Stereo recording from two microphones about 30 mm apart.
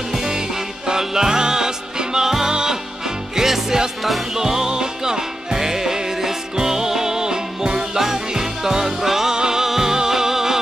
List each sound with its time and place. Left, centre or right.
0.2 s music: right
9.3 s music: right